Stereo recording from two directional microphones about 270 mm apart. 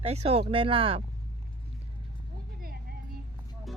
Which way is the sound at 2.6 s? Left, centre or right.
Right.